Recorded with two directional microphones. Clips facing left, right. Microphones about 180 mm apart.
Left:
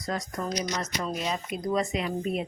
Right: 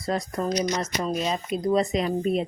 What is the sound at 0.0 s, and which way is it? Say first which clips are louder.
Speech: right 5 dB; 30° right (ahead or behind).